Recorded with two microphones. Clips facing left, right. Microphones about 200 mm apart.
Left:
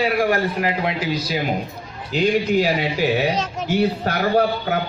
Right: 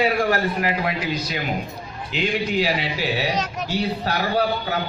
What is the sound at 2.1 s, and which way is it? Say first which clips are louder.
Speech: left 5 dB; 45° left (ahead or behind).